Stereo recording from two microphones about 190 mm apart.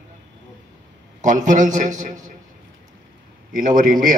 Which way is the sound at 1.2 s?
40° right (ahead or behind).